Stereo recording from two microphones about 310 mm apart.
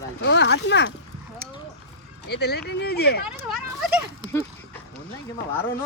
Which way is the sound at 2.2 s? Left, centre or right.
Left.